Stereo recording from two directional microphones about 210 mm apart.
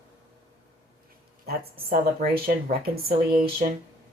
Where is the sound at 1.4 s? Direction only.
45° right (ahead or behind).